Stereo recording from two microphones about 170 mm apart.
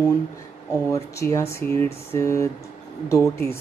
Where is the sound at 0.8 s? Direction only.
15° left (ahead or behind).